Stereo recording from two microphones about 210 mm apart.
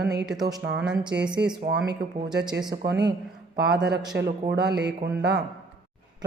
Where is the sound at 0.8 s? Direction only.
5° right (ahead or behind).